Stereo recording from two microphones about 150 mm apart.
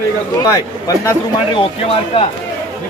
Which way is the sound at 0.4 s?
20° left (ahead or behind).